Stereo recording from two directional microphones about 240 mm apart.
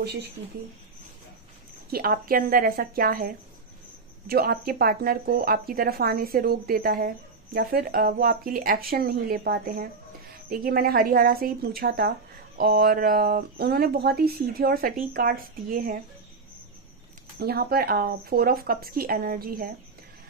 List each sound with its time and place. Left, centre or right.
0.0 s speech: right
1.9 s speech: right
17.4 s speech: right